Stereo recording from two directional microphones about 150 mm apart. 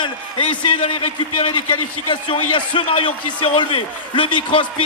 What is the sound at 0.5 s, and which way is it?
A man's voice, 35° left (ahead or behind).